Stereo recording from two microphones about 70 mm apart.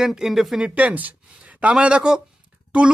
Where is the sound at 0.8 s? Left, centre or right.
Right.